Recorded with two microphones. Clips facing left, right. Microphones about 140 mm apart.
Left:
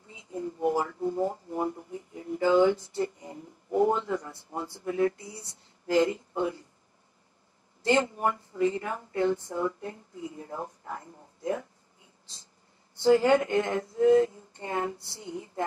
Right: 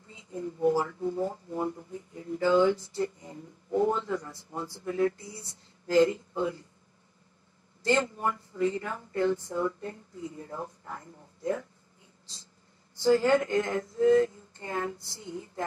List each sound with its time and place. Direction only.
0.6 s speech: 20° left (ahead or behind)
7.8 s speech: 20° left (ahead or behind)
13.0 s speech: 25° left (ahead or behind)